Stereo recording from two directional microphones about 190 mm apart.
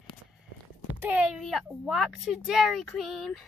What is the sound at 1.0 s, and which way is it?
A child's voice, 5° right (ahead or behind).